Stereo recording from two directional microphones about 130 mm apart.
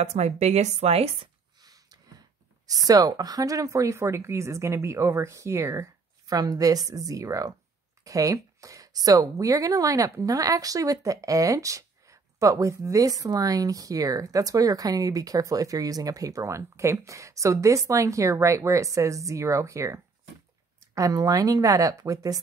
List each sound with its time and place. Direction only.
0.0 s speech: 55° right (ahead or behind)
1.6 s a sound: 30° right (ahead or behind)
2.6 s speech: 30° right (ahead or behind)